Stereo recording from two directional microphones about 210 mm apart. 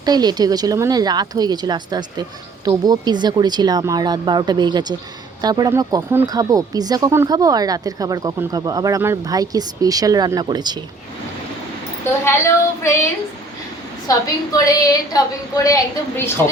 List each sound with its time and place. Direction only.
0.0 s speech: 20° right (ahead or behind)
12.2 s a woman's voice: 15° left (ahead or behind)
14.3 s a woman's voice: 15° left (ahead or behind)